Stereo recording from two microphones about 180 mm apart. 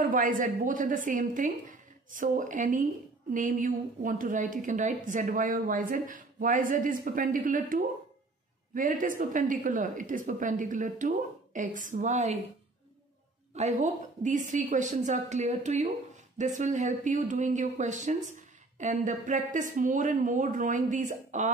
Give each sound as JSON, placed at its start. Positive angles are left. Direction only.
{"t": 0.0, "sound": "a woman's voice", "side_deg": -45}
{"t": 13.6, "sound": "a woman's voice", "side_deg": -40}